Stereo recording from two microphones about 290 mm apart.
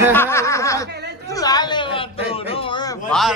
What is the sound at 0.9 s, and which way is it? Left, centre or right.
Chatter, right.